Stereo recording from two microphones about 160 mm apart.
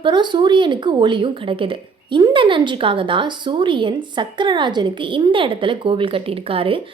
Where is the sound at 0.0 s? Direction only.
30° right (ahead or behind).